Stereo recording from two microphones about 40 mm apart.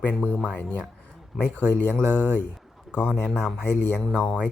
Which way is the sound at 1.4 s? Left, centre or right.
Left.